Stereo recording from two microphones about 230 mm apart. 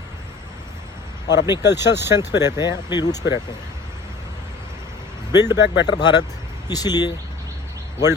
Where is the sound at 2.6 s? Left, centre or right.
Centre.